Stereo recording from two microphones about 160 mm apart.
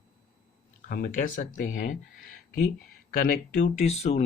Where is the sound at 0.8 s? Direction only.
60° left (ahead or behind).